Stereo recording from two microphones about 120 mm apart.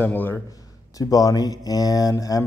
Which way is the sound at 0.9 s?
30° left (ahead or behind).